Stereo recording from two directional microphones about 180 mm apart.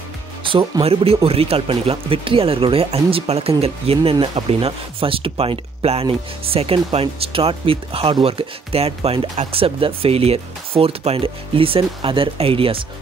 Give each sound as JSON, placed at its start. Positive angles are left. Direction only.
{"t": 0.4, "sound": "speech", "side_deg": -30}